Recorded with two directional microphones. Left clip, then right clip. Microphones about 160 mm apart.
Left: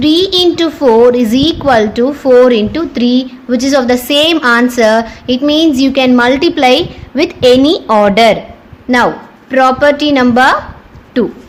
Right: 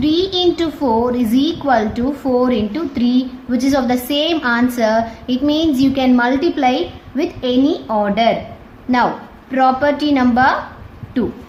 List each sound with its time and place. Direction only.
0.0 s a woman's voice: 45° left (ahead or behind)
9.5 s a woman's voice: 50° left (ahead or behind)